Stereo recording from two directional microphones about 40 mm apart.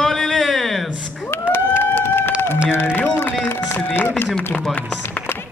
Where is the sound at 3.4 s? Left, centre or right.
Left.